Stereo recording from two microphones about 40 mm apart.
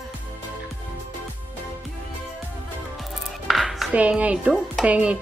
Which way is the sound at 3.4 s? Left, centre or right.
Centre.